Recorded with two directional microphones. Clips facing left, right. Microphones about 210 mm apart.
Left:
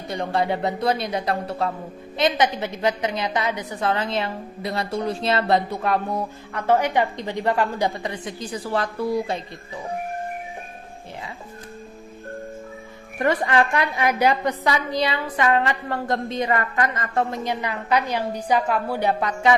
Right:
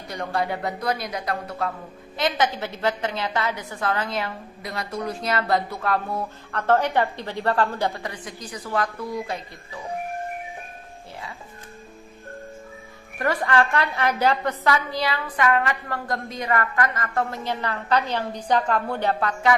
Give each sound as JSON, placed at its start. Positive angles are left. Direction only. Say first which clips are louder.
{"t": 0.1, "sound": "a woman's voice", "louder": "left 3 dB", "side_deg": 25}
{"t": 13.1, "sound": "a woman's voice", "louder": "left 2 dB", "side_deg": 20}